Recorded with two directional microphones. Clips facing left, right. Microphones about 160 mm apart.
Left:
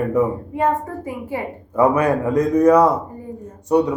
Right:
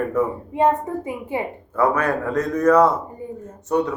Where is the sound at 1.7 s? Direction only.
15° left (ahead or behind).